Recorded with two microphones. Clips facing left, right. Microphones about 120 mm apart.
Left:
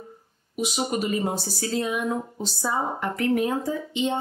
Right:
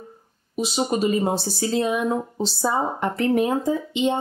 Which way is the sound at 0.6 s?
30° right (ahead or behind).